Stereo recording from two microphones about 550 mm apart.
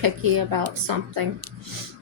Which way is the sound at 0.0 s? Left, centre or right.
Right.